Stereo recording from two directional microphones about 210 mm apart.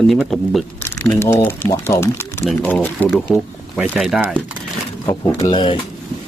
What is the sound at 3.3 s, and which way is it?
A man's voice, 5° right (ahead or behind).